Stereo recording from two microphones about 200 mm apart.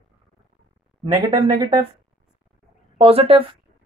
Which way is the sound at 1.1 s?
20° right (ahead or behind).